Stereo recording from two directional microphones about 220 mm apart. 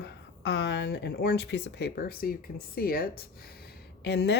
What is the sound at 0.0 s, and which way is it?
Speech, 55° left (ahead or behind).